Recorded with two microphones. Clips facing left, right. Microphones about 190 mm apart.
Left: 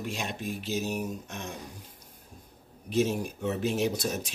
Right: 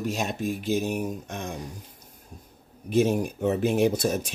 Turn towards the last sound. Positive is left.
turn(degrees=-55)  # may be behind; listen again after turning